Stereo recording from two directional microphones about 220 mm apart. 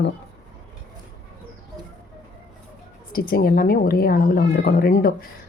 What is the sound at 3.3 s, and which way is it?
Speech, 40° left (ahead or behind).